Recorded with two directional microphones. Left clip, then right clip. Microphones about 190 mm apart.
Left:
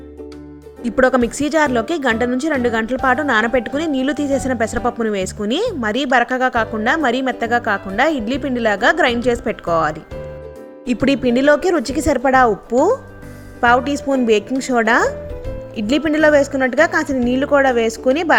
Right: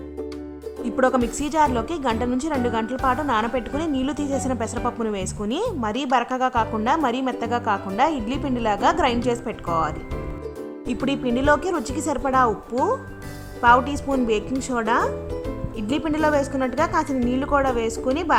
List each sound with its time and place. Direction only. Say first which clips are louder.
0.9 s a woman's voice: left 6 dB; 15° left (ahead or behind)
11.0 s a woman's voice: left 7 dB; 20° left (ahead or behind)
13.6 s a woman's voice: left 2 dB; 15° left (ahead or behind)